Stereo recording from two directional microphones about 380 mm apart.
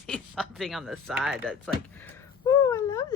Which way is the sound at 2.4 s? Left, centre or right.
Centre.